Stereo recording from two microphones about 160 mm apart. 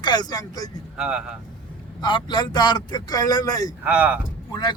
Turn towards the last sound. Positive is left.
turn(degrees=30)  # may be behind; listen again after turning